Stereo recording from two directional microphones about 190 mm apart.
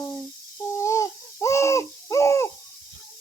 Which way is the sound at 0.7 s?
15° left (ahead or behind).